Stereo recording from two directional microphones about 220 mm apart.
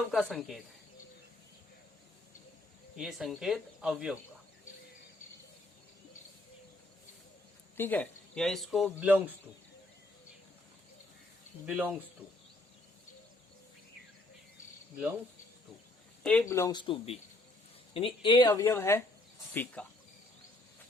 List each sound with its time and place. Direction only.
0.1 s speech: centre (ahead or behind)
2.9 s speech: centre (ahead or behind)
7.8 s speech: 5° left (ahead or behind)
11.6 s speech: 5° right (ahead or behind)
16.2 s speech: 5° left (ahead or behind)